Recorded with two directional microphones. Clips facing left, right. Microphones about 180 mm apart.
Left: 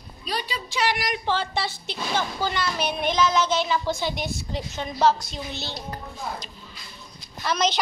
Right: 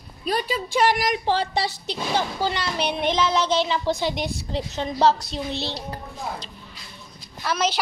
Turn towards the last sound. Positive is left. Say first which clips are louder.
# even
turn(degrees=-5)  # may be behind; listen again after turning